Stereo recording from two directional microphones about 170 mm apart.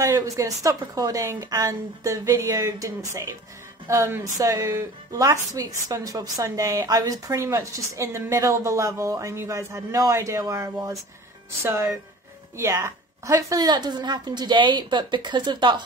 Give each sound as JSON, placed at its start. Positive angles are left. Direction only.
{"t": 0.0, "sound": "speech", "side_deg": -15}